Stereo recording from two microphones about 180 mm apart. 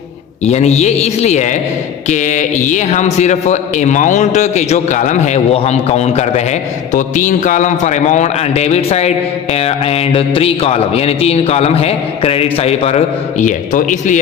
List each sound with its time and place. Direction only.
0.4 s a man's voice: 35° left (ahead or behind)
13.4 s speech: 45° left (ahead or behind)